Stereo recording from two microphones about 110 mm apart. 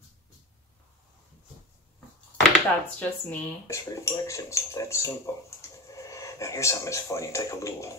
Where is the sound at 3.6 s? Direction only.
25° left (ahead or behind).